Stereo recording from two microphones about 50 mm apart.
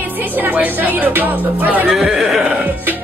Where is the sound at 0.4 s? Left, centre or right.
Right.